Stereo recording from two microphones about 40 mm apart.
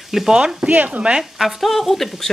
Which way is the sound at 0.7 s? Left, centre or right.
Right.